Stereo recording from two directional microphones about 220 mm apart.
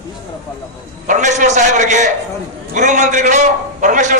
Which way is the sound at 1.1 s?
35° right (ahead or behind).